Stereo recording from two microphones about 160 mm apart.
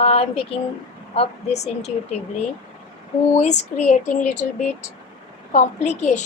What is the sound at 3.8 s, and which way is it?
Speech, 50° left (ahead or behind).